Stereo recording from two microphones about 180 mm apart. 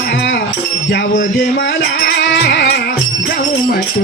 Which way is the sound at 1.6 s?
65° left (ahead or behind).